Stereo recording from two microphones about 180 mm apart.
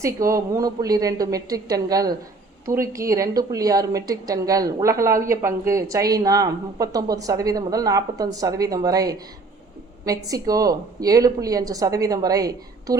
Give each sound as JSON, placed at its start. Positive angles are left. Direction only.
{"t": 0.0, "sound": "a woman's voice", "side_deg": -15}